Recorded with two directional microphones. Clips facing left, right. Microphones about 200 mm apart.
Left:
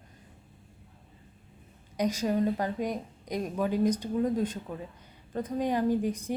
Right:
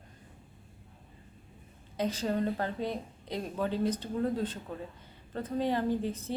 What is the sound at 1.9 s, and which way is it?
A woman's voice, 15° left (ahead or behind).